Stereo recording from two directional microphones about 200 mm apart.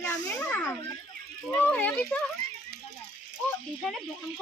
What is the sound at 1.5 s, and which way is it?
Speech, 10° left (ahead or behind).